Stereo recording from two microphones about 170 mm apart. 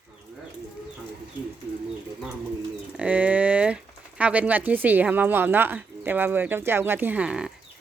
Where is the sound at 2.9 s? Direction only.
10° right (ahead or behind).